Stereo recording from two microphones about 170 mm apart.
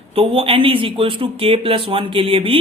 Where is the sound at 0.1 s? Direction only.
35° right (ahead or behind).